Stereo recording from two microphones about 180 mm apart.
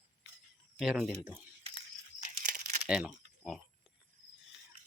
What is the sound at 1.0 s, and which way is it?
Speech, 10° right (ahead or behind).